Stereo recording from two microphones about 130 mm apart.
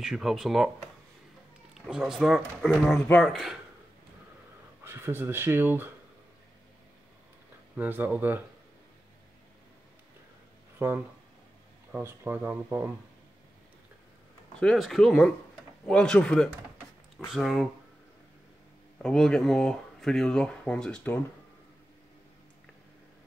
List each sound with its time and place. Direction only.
0.0 s speech: centre (ahead or behind)
1.7 s speech: 5° right (ahead or behind)
4.8 s speech: 20° right (ahead or behind)
7.7 s speech: 15° right (ahead or behind)
11.9 s speech: 15° right (ahead or behind)
14.6 s speech: 5° left (ahead or behind)
19.0 s speech: 5° left (ahead or behind)